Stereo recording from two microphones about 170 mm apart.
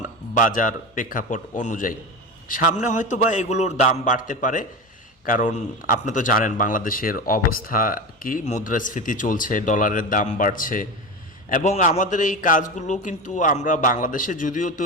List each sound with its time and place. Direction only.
0.3 s a man's voice: 50° left (ahead or behind)